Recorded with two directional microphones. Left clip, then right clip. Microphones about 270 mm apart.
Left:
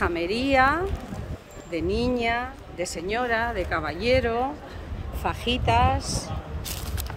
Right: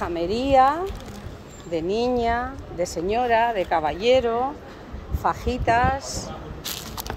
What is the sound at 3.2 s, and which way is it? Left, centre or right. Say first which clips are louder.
Speech: right 7 dB; left.